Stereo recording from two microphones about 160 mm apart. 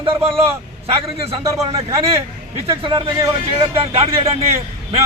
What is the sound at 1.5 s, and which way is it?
Speech, 20° right (ahead or behind).